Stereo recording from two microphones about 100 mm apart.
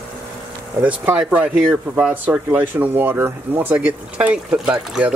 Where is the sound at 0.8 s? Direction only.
20° right (ahead or behind).